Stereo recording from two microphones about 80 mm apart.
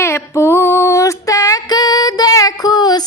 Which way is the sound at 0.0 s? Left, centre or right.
Left.